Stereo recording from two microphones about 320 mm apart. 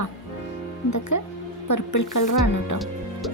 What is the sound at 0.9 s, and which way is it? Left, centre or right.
Speech, left.